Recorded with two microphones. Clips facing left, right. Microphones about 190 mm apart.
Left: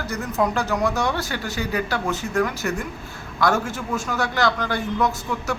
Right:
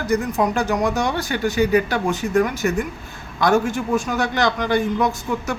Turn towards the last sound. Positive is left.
turn(degrees=-15)  # may be behind; listen again after turning